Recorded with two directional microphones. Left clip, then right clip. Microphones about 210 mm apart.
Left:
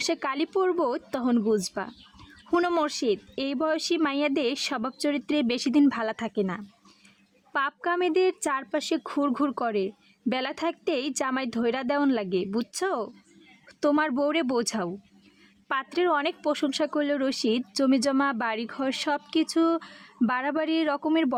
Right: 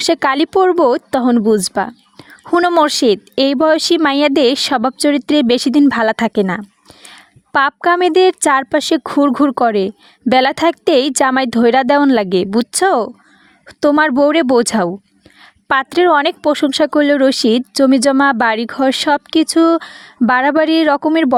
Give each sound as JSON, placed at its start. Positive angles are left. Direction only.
{"t": 0.0, "sound": "a woman's voice", "side_deg": -45}